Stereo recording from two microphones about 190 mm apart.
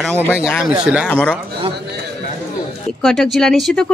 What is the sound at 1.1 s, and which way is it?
Speech, 10° left (ahead or behind).